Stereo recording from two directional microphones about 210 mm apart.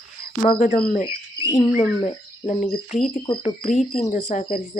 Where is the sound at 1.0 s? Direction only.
15° left (ahead or behind).